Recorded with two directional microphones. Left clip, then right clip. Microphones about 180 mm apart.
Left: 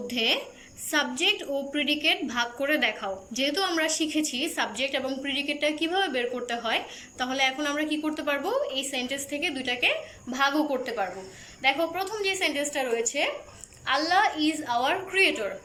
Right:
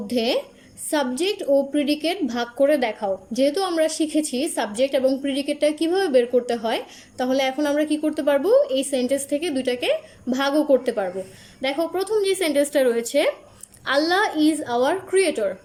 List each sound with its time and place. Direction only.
0.1 s a woman's voice: 30° right (ahead or behind)